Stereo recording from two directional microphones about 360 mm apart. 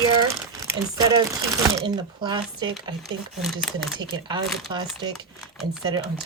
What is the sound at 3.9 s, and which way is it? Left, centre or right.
Speech, centre.